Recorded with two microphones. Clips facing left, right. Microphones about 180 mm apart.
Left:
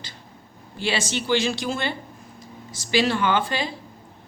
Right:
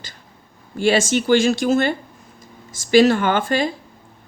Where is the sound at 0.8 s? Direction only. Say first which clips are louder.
Right 9 dB; 50° right (ahead or behind).